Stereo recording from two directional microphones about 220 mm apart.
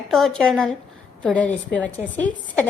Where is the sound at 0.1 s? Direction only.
Centre (ahead or behind).